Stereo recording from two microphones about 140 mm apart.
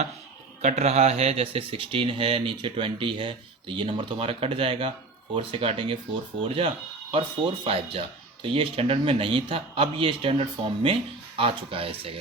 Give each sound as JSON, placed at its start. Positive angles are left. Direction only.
{"t": 0.6, "sound": "a man's voice", "side_deg": -55}